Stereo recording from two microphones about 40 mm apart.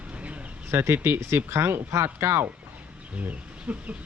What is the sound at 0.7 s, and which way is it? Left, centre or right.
Speech, right.